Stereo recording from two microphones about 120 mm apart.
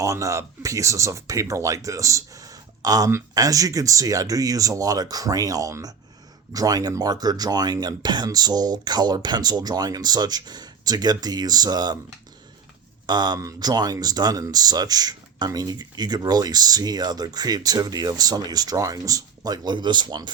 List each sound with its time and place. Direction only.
0.0 s speech: 25° right (ahead or behind)
13.1 s speech: 35° right (ahead or behind)